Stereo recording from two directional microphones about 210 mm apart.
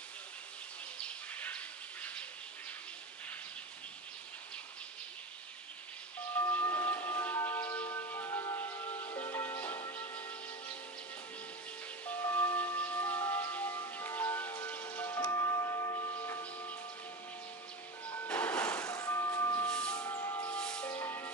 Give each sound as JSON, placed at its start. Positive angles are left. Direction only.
{"t": 1.0, "sound": "bird", "side_deg": 5}
{"t": 6.3, "sound": "a sound", "side_deg": 10}
{"t": 12.1, "sound": "music", "side_deg": 10}
{"t": 15.0, "sound": "a sound", "side_deg": 15}
{"t": 18.0, "sound": "music", "side_deg": 15}
{"t": 18.3, "sound": "music", "side_deg": 5}
{"t": 19.7, "sound": "music", "side_deg": 5}
{"t": 20.0, "sound": "music", "side_deg": 20}
{"t": 20.4, "sound": "music", "side_deg": 5}